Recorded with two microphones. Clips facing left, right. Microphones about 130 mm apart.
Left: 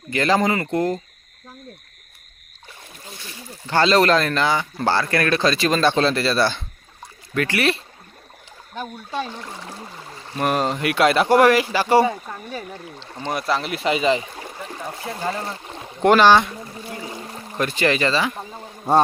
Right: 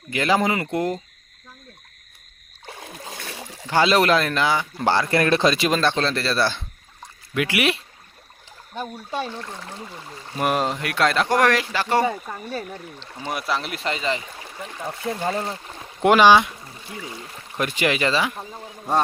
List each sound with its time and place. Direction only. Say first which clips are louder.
0.1 s speech: left 2 dB; 10° right (ahead or behind)
2.6 s splash: right 5 dB; 80° right
3.7 s speech: left 1 dB; 10° right (ahead or behind)
4.9 s speech: right 1 dB; 20° right (ahead or behind)
5.8 s speech: left 4 dB; 5° left (ahead or behind); by 7.8 s 10° right (ahead or behind)
8.8 s speech: even; 10° right (ahead or behind)
10.3 s speech: left 1 dB; 5° right (ahead or behind); by 13.1 s 10° left (ahead or behind)
13.1 s speech: left 3 dB; 5° right (ahead or behind); by 14.2 s 15° left (ahead or behind)
15.2 s speech: even; 30° right (ahead or behind)
16.0 s speech: even; 10° right (ahead or behind)
17.0 s a sound: left 3 dB; 35° left (ahead or behind)
17.6 s speech: left 2 dB; 10° right (ahead or behind)